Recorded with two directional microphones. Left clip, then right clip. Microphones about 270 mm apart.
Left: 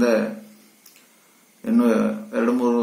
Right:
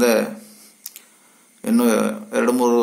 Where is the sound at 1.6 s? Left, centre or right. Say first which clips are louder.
Right 2 dB; right.